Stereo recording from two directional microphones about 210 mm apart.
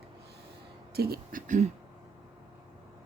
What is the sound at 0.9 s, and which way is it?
Speech, 45° right (ahead or behind).